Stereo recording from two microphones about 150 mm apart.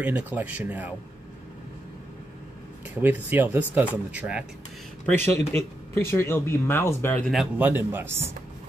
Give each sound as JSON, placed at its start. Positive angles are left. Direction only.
{"t": 0.0, "sound": "speech", "side_deg": -10}
{"t": 2.9, "sound": "speech", "side_deg": -10}
{"t": 5.0, "sound": "speech", "side_deg": 15}
{"t": 7.5, "sound": "speech", "side_deg": -10}